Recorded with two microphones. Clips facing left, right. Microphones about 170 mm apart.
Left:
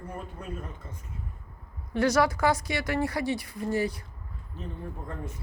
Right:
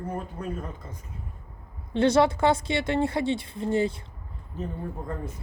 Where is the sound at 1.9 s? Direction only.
25° right (ahead or behind).